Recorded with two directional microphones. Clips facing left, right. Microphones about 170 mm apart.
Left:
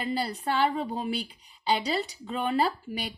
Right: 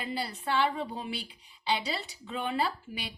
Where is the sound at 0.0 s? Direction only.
40° left (ahead or behind).